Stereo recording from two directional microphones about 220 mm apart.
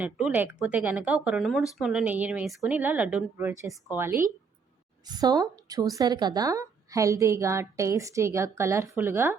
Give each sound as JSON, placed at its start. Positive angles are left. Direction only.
{"t": 0.0, "sound": "a woman's voice", "side_deg": -5}